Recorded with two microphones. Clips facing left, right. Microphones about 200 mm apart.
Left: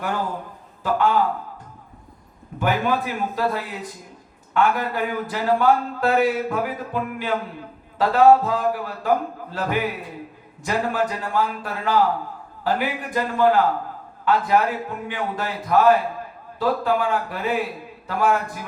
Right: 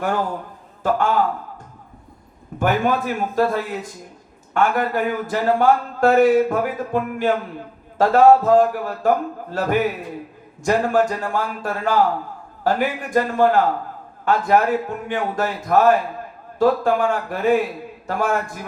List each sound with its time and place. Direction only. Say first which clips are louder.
0.8 s a man's voice: right 1 dB; 45° right (ahead or behind)
2.6 s speech: right 3 dB; 45° right (ahead or behind)